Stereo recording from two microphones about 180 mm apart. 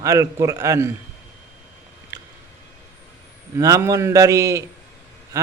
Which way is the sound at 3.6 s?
20° right (ahead or behind).